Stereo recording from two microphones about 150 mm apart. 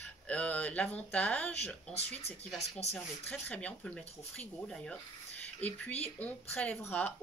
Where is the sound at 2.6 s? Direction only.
45° left (ahead or behind).